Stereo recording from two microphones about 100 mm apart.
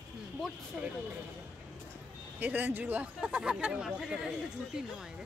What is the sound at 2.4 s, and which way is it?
Speech, 15° right (ahead or behind).